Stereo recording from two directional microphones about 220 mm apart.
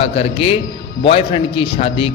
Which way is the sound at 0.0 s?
25° left (ahead or behind).